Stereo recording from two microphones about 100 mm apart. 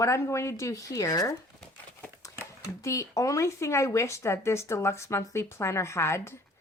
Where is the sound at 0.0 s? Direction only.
30° left (ahead or behind).